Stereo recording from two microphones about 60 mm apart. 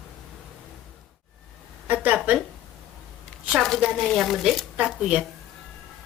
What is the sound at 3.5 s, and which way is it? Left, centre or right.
A woman's voice, centre.